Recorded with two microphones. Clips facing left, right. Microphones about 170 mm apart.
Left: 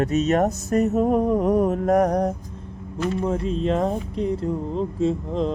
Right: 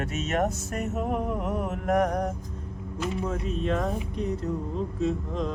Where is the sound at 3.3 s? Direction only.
30° left (ahead or behind).